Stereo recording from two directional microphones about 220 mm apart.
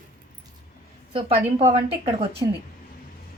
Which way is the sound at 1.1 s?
25° right (ahead or behind).